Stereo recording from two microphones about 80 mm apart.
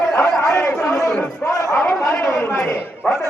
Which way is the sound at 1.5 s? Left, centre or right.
Left.